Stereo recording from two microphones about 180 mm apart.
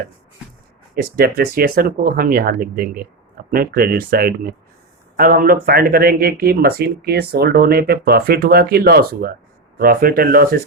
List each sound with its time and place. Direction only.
0.9 s speech: 55° right (ahead or behind)